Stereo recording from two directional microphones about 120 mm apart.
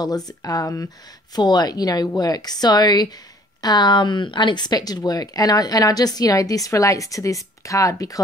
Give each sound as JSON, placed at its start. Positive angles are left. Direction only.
{"t": 0.3, "sound": "speech", "side_deg": 30}